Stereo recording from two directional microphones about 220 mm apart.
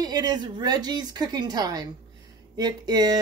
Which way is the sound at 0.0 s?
15° right (ahead or behind).